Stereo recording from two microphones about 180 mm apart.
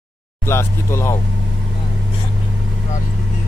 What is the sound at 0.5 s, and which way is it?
Speech, 15° left (ahead or behind).